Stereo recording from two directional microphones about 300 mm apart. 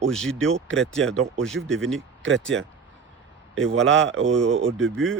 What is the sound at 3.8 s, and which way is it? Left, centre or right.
Speech, right.